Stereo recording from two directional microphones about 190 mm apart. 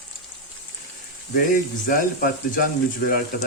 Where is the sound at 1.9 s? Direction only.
45° left (ahead or behind).